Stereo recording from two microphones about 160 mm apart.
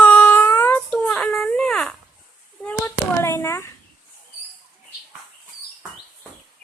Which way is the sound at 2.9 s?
15° left (ahead or behind).